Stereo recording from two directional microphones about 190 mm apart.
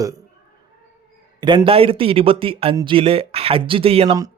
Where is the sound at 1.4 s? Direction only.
25° right (ahead or behind).